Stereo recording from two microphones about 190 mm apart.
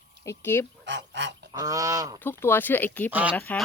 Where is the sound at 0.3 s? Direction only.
15° left (ahead or behind).